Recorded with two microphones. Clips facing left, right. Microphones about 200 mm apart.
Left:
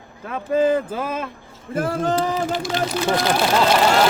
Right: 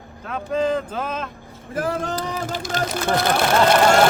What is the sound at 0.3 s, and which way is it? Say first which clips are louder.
Speech: left 3 dB; 5° left (ahead or behind).